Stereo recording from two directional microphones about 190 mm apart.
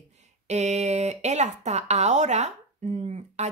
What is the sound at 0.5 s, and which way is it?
Speech, 35° right (ahead or behind).